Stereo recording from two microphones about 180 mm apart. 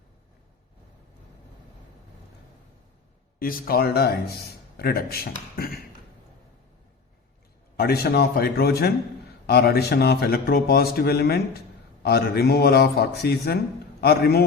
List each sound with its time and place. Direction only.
3.3 s a man's voice: 55° left (ahead or behind)
7.8 s a man's voice: 65° left (ahead or behind)